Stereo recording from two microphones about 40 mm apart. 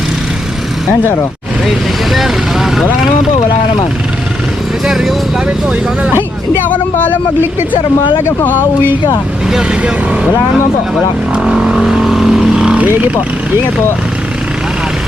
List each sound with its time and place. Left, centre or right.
2.1 s speech: centre
4.9 s speech: centre
6.7 s speech: left
11.3 s vehicle: right